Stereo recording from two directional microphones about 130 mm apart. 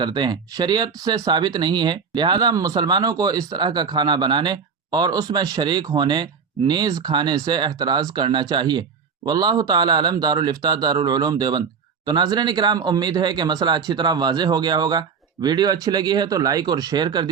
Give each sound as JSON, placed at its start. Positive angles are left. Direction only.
{"t": 0.0, "sound": "speech", "side_deg": -35}